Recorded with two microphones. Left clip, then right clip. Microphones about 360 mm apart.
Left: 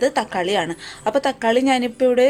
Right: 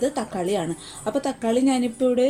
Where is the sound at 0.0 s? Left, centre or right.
Left.